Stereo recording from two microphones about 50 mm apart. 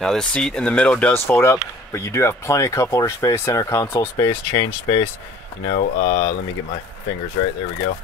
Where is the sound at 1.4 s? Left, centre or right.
Left.